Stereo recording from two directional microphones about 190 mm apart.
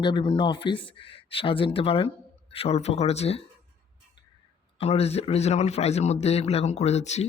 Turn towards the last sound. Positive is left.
turn(degrees=35)  # may be behind; listen again after turning